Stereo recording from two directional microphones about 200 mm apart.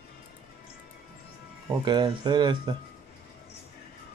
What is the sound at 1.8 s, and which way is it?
Speech, 25° right (ahead or behind).